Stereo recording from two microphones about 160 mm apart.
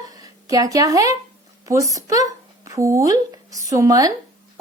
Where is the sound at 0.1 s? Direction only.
20° right (ahead or behind).